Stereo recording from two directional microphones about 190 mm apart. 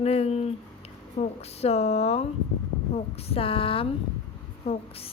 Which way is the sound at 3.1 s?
30° left (ahead or behind).